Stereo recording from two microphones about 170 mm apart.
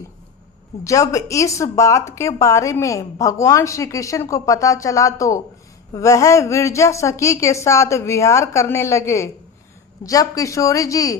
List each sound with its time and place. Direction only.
0.9 s a woman's voice: 20° left (ahead or behind)